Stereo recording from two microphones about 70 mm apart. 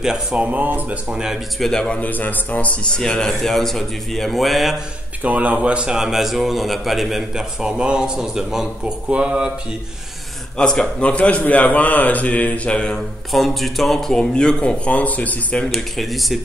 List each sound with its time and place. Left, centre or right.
0.0 s a man's voice: centre
0.5 s speech: right
1.1 s a man's voice: centre
1.7 s a man's voice: centre
2.0 s a man's voice: left; by 4.7 s centre
5.2 s a man's voice: centre
9.1 s a man's voice: centre
10.6 s a man's voice: centre
13.3 s a man's voice: centre; by 15.6 s left
15.6 s speech: centre